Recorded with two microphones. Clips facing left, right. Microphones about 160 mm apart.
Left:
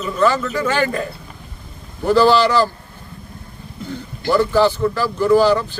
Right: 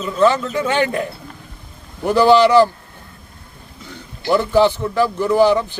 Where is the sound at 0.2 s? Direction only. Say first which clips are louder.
Right 2 dB; 20° right (ahead or behind).